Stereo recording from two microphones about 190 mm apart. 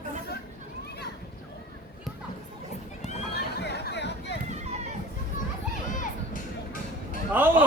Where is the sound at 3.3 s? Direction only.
60° left (ahead or behind).